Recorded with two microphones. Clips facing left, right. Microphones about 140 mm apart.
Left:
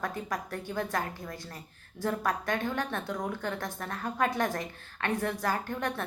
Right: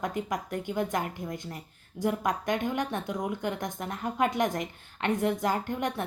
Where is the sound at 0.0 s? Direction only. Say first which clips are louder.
Right 3 dB; 20° right (ahead or behind).